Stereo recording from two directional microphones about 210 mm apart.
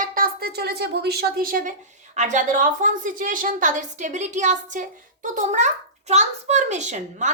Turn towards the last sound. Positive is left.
turn(degrees=-35)  # may be behind; listen again after turning